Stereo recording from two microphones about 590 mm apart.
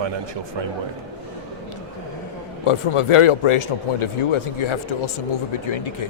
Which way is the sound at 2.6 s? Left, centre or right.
Left.